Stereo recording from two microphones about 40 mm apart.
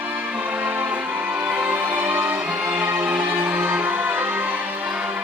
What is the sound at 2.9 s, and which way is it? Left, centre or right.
Music, right.